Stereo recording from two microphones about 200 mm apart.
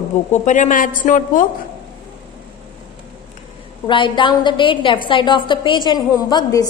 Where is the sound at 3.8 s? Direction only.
25° left (ahead or behind).